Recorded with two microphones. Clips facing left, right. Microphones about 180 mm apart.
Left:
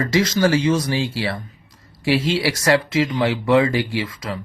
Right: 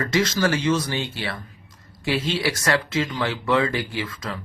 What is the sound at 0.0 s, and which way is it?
Speech, 25° left (ahead or behind).